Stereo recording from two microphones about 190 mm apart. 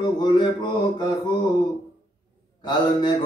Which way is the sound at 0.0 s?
25° left (ahead or behind).